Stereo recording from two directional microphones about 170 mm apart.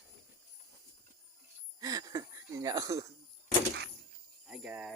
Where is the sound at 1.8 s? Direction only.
20° right (ahead or behind).